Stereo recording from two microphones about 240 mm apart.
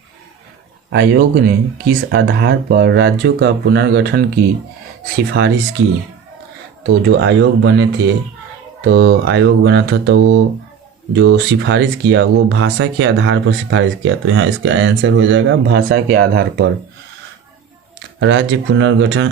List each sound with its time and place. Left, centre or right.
0.9 s speech: right
5.4 s speech: right
6.8 s speech: right
18.2 s speech: right